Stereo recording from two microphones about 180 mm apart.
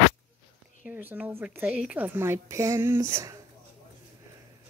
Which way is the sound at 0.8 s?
10° right (ahead or behind).